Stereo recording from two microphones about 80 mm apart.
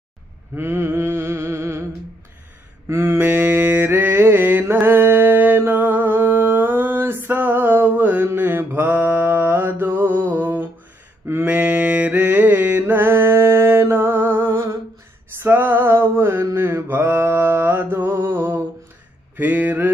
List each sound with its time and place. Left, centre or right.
0.6 s a sound: right
2.9 s mantra: right
15.3 s music: right
16.4 s mantra: right